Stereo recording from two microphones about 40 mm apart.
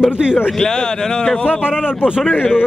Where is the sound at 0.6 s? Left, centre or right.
Centre.